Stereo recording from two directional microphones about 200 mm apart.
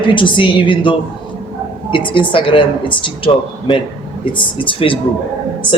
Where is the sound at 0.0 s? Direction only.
25° left (ahead or behind).